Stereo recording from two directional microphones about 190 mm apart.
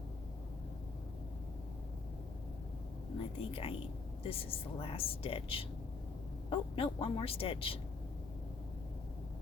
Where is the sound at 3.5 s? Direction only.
30° left (ahead or behind).